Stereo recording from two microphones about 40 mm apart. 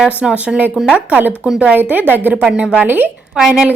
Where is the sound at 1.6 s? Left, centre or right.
Right.